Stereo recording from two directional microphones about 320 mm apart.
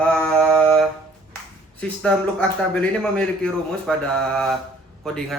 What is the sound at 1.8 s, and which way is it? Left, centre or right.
A man's voice, centre.